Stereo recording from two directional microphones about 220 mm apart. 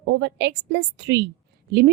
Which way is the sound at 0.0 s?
50° right (ahead or behind).